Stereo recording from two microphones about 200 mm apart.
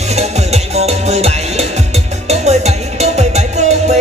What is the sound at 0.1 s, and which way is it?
Music, 30° right (ahead or behind).